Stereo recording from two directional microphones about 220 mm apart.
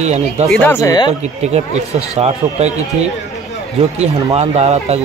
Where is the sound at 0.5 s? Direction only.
10° left (ahead or behind).